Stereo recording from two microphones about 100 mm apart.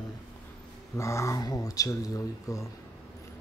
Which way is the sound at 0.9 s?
30° left (ahead or behind).